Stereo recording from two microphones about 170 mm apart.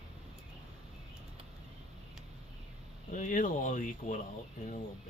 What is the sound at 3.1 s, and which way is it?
Speech, 50° left (ahead or behind).